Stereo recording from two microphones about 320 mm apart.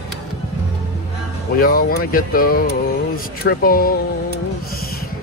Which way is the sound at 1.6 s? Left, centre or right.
Left.